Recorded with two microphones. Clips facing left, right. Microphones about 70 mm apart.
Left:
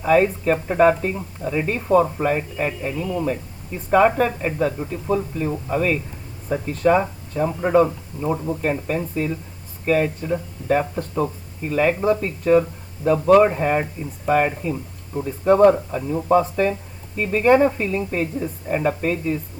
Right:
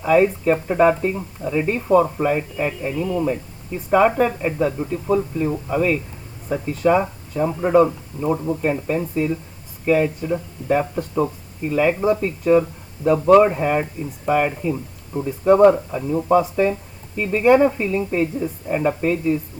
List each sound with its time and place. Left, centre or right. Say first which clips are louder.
0.0 s speech: right 1 dB; centre
1.7 s speech: right 1 dB; centre